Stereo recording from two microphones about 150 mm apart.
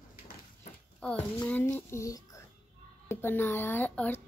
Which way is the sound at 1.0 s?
5° left (ahead or behind).